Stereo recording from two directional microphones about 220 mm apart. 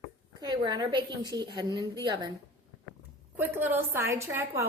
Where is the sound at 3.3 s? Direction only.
10° right (ahead or behind).